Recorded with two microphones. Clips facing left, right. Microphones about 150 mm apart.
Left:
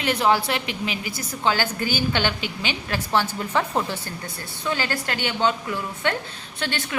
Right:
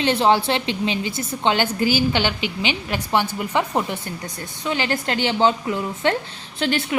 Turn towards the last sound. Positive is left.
turn(degrees=-25)  # may be behind; listen again after turning